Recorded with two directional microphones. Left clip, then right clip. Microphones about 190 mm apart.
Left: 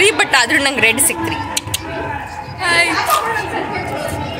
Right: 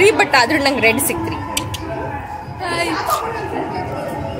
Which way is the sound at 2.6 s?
15° right (ahead or behind).